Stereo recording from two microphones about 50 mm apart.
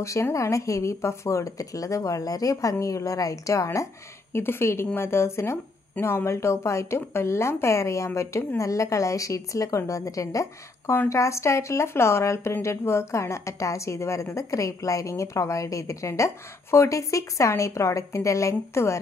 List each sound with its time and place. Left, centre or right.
0.0 s a woman's voice: left
1.9 s a woman's voice: left
4.4 s a woman's voice: left
8.5 s a woman's voice: left